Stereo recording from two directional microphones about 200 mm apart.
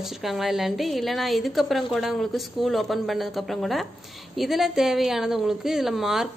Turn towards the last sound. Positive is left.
turn(degrees=0)  # may be behind; listen again after turning